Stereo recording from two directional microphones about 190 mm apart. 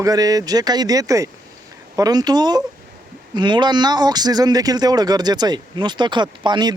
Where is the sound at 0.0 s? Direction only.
20° right (ahead or behind).